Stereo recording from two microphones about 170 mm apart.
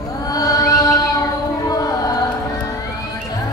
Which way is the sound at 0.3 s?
20° left (ahead or behind).